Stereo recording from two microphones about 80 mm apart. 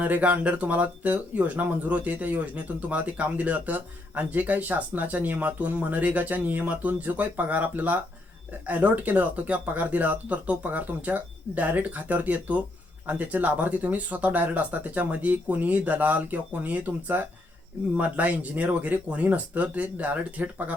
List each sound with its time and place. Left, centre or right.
0.0 s speech: centre